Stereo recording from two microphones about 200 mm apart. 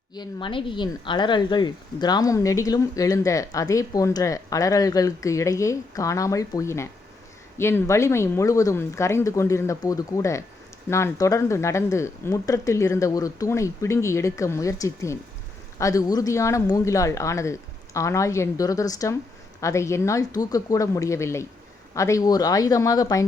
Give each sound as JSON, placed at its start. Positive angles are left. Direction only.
{"t": 0.1, "sound": "speech", "side_deg": 20}